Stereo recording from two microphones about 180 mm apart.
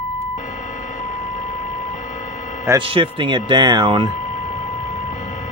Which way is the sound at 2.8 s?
30° right (ahead or behind).